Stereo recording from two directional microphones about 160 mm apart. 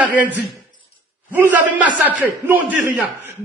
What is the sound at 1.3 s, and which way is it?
A man's voice, 10° right (ahead or behind).